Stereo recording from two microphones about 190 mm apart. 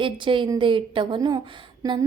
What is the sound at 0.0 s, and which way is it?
Speech, 25° right (ahead or behind).